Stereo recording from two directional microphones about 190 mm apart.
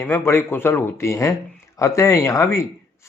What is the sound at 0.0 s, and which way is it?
Speech, 15° left (ahead or behind).